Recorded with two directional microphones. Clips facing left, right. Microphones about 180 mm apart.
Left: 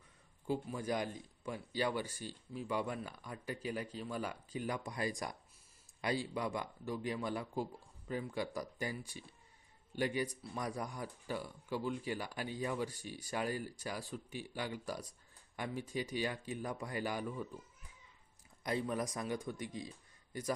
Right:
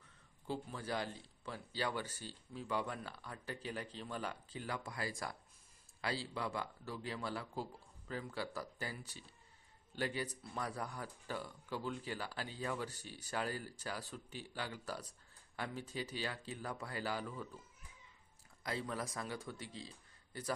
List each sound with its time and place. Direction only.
0.4 s speech: 15° left (ahead or behind)
18.6 s speech: 20° left (ahead or behind)